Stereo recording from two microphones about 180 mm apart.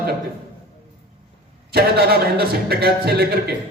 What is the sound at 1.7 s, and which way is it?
A man's voice, 60° right (ahead or behind).